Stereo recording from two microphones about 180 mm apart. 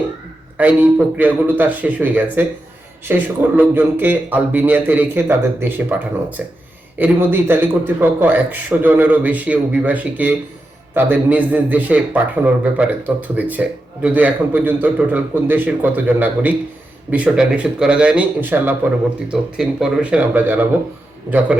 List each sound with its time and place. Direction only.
0.5 s a man's voice: 10° right (ahead or behind)
7.0 s a man's voice: 10° right (ahead or behind)